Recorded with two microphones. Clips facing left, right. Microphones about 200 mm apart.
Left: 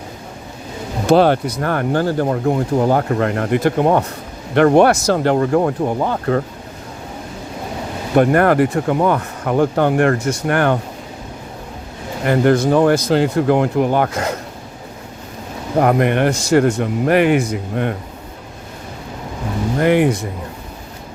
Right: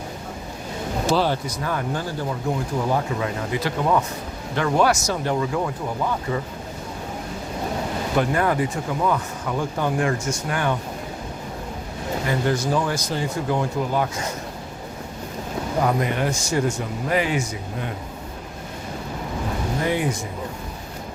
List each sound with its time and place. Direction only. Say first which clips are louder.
1.0 s speech: left 10 dB; 60° left (ahead or behind)
8.1 s speech: left 9 dB; 60° left (ahead or behind)
12.2 s speech: left 10 dB; 60° left (ahead or behind)
15.8 s speech: left 8 dB; 65° left (ahead or behind)
19.8 s speech: left 10 dB; 70° left (ahead or behind)